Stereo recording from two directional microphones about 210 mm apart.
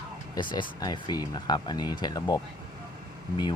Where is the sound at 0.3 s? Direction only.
20° left (ahead or behind).